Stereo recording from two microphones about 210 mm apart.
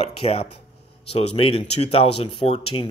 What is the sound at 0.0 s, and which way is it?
Speech, 25° left (ahead or behind).